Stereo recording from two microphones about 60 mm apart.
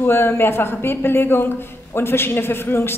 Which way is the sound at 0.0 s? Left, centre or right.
Left.